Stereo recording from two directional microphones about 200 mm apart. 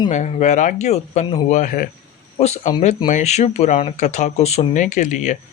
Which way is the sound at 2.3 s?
35° left (ahead or behind).